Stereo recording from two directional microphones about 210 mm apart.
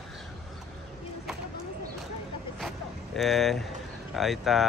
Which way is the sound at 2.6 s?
Centre (ahead or behind).